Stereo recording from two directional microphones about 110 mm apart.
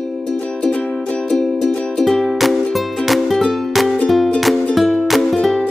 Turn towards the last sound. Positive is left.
turn(degrees=0)  # may be behind; listen again after turning